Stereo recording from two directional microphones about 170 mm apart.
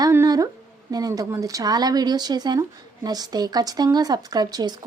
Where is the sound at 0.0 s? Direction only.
20° right (ahead or behind).